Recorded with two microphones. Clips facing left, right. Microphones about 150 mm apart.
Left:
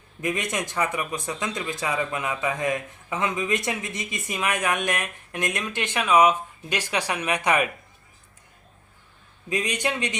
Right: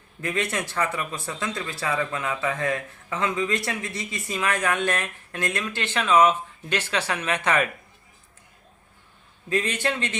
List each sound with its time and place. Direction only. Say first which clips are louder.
0.2 s speech: even; 15° left (ahead or behind)
9.5 s speech: right 1 dB; 15° left (ahead or behind)